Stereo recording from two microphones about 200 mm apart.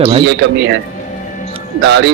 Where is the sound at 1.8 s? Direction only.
60° right (ahead or behind).